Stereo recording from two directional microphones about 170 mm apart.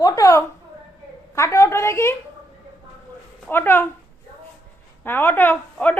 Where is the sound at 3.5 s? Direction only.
15° left (ahead or behind).